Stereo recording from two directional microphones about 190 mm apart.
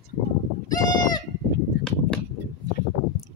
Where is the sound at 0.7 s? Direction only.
20° left (ahead or behind).